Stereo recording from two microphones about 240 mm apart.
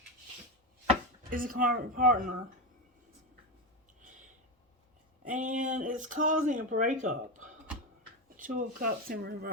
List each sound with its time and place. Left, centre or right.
1.3 s speech: right
5.2 s speech: right